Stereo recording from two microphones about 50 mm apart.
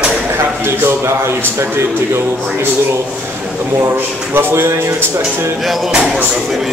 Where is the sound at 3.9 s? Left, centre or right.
Right.